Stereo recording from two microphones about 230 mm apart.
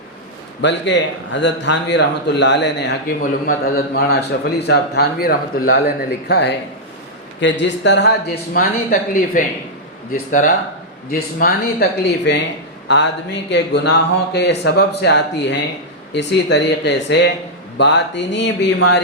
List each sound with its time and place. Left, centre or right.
0.6 s speech: left
8.5 s speech: left